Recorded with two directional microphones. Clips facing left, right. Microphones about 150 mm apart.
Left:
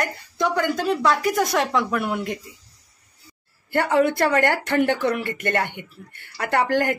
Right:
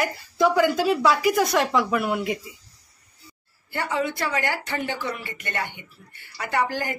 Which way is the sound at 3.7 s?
55° left (ahead or behind).